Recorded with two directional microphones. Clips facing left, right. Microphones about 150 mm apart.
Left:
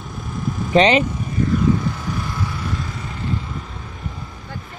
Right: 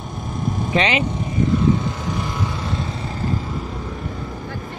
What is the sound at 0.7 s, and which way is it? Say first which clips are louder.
Speech: left 6 dB; 35° left (ahead or behind).